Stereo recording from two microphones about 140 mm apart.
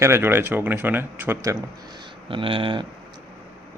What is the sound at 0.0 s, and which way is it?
Speech, 15° right (ahead or behind).